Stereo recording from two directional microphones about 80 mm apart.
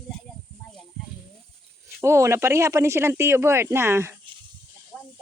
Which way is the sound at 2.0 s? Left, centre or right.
Right.